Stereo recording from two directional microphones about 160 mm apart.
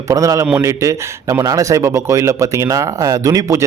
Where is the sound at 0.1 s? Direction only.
20° right (ahead or behind).